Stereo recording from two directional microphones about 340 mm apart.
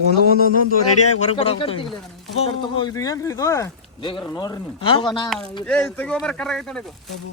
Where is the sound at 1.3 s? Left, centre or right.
Centre.